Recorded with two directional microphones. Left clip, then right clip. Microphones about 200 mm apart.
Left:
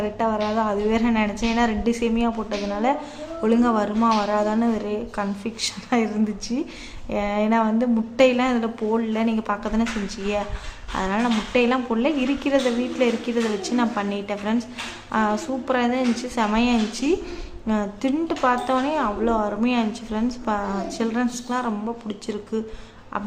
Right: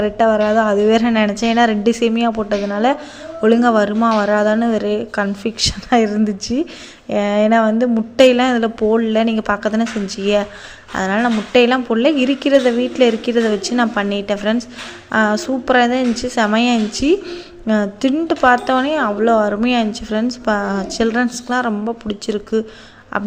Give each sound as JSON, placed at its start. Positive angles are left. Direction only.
{"t": 0.0, "sound": "speech", "side_deg": -25}
{"t": 10.9, "sound": "speech", "side_deg": -20}